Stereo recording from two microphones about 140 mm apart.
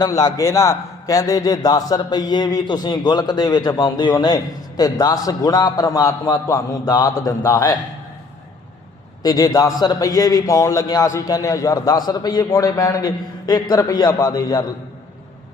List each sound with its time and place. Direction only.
0.0 s a man's voice: 25° left (ahead or behind)
9.2 s a man's voice: 25° left (ahead or behind)